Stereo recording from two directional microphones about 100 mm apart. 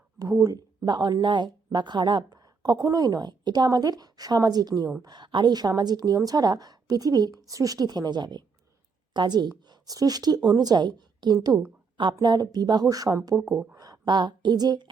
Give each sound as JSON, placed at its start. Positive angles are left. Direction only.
{"t": 0.2, "sound": "speech", "side_deg": -35}
{"t": 13.4, "sound": "speech", "side_deg": 0}
{"t": 13.7, "sound": "a sound", "side_deg": -40}